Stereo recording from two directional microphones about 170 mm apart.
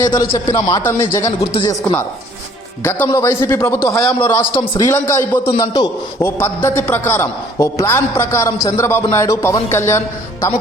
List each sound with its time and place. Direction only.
0.0 s a man's voice: 20° left (ahead or behind)
1.4 s speech: 30° left (ahead or behind)
2.8 s a man's voice: 15° left (ahead or behind)
4.2 s a man's voice: 25° left (ahead or behind)